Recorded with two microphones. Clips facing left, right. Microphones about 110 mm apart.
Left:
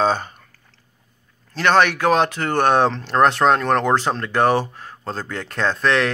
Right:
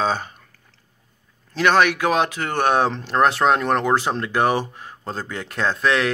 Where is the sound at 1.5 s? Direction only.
10° right (ahead or behind).